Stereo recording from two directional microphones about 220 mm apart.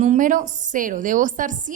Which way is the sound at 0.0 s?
35° right (ahead or behind).